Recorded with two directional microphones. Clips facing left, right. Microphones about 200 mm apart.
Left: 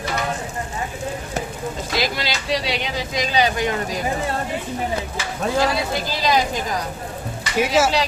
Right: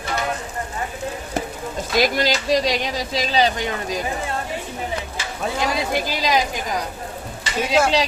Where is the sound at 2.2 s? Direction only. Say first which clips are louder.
Right 5 dB; 45° right (ahead or behind).